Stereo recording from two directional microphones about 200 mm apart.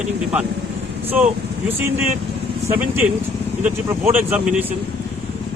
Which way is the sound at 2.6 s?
10° right (ahead or behind).